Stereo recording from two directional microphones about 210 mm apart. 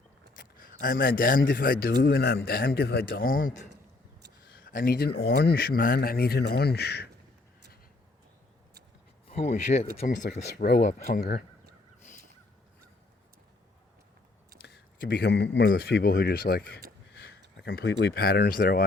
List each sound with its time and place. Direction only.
0.6 s a man's voice: 40° left (ahead or behind)
4.4 s a sound: 40° left (ahead or behind)
5.2 s a man's voice: 45° left (ahead or behind)
9.3 s a man's voice: 35° left (ahead or behind)
14.6 s a man's voice: 50° left (ahead or behind)